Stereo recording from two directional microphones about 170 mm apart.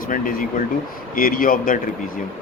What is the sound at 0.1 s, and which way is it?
Speech, 55° left (ahead or behind).